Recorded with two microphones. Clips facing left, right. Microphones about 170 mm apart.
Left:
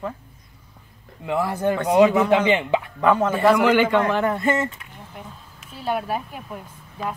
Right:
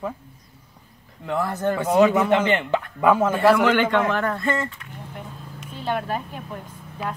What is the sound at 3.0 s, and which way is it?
Speech, 5° right (ahead or behind).